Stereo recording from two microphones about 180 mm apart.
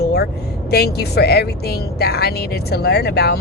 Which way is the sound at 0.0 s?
65° left (ahead or behind).